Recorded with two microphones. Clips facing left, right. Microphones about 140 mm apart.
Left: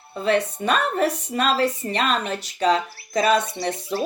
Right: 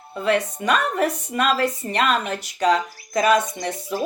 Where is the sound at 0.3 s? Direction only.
30° left (ahead or behind).